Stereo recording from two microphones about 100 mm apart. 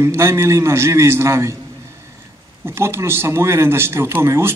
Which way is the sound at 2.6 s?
25° right (ahead or behind).